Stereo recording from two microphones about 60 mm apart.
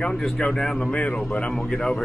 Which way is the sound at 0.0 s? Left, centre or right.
Centre.